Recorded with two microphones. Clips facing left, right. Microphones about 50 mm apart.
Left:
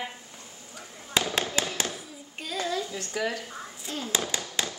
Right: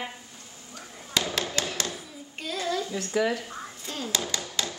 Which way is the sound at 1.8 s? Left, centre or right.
Centre.